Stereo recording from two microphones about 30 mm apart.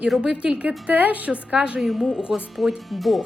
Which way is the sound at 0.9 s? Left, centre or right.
Right.